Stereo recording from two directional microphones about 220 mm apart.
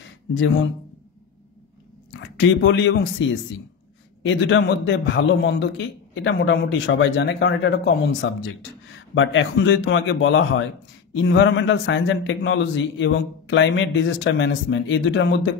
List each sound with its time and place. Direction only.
0.3 s a man's voice: 60° left (ahead or behind)
2.0 s a man's voice: 55° left (ahead or behind)